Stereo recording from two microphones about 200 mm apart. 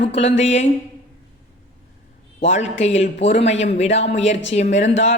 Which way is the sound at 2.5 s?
35° left (ahead or behind).